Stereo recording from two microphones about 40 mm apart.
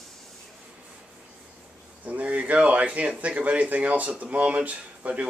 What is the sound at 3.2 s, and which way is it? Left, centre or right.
Speech, right.